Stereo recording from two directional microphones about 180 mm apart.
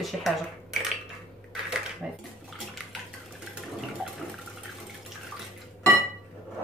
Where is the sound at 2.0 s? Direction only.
5° right (ahead or behind).